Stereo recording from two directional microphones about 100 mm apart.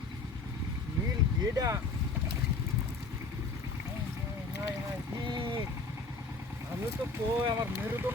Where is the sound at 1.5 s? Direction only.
35° right (ahead or behind).